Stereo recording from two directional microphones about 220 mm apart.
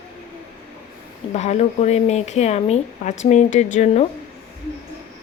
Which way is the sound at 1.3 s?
30° left (ahead or behind).